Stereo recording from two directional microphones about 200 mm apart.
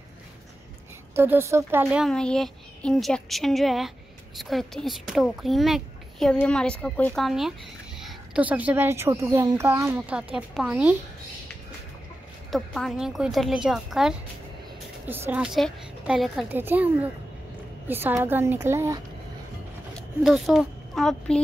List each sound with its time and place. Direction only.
1.1 s a woman's voice: 10° right (ahead or behind)
12.4 s a woman's voice: centre (ahead or behind)
20.2 s speech: centre (ahead or behind)